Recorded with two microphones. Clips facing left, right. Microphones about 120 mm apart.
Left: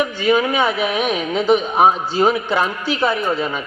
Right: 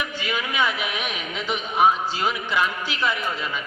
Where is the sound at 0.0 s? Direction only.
35° left (ahead or behind).